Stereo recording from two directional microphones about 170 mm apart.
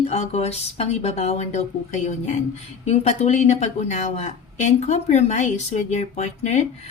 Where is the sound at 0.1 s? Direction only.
40° left (ahead or behind).